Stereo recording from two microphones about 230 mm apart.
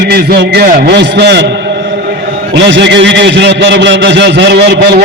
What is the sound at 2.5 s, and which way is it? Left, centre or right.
A man's voice, right.